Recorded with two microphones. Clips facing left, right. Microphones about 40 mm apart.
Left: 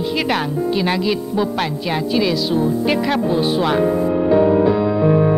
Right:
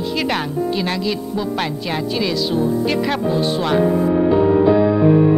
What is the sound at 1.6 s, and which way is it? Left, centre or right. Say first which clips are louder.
A woman's voice: left 1 dB; centre.